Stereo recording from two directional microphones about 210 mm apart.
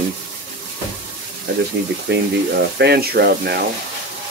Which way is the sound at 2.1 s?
50° right (ahead or behind).